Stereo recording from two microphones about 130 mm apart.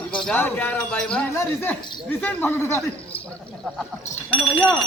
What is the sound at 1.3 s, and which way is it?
Speech, 20° left (ahead or behind).